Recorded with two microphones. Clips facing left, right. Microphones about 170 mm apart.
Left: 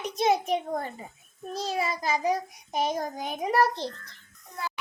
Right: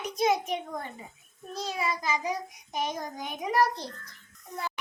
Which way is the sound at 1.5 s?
30° left (ahead or behind).